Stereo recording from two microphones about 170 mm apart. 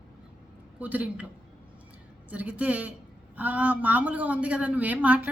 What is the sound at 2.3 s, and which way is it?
A man's voice, 10° right (ahead or behind).